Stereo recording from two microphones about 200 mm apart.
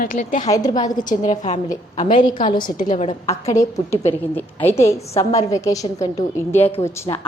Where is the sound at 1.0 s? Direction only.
40° left (ahead or behind).